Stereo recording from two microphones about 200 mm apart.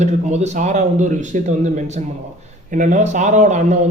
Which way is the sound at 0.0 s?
35° right (ahead or behind).